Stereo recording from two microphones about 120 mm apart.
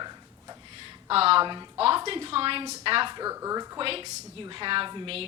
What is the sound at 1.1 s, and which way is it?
A woman's voice, 55° right (ahead or behind).